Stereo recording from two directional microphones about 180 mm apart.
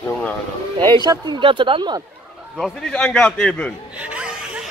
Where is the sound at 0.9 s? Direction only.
20° right (ahead or behind).